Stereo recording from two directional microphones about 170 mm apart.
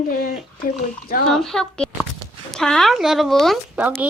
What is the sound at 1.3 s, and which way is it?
A woman's voice, 5° left (ahead or behind).